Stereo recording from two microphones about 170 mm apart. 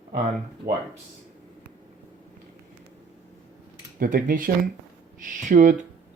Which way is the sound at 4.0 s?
55° right (ahead or behind).